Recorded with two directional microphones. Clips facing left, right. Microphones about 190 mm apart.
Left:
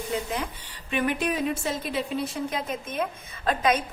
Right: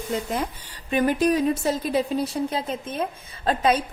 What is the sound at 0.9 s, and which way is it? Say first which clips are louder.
Speech: right 6 dB; 40° right (ahead or behind).